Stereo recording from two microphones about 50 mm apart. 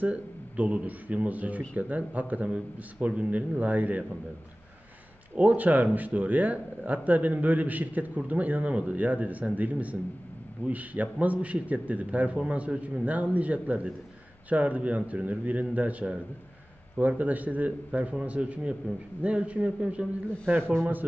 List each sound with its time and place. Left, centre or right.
0.0 s a man's voice: right
5.3 s a man's voice: right
20.4 s a man's voice: right